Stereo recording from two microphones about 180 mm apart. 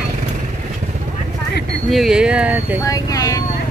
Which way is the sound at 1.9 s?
Centre (ahead or behind).